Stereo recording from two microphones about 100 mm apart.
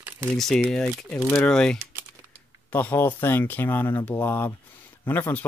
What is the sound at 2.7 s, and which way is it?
Speech, 20° left (ahead or behind).